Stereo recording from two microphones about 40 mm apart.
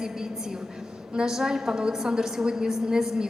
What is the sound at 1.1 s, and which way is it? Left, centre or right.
A woman's voice, centre.